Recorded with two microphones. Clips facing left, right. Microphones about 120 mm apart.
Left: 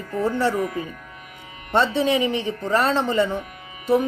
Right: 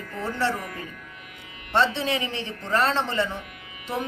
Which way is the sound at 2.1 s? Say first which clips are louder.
Left 7 dB; 15° left (ahead or behind).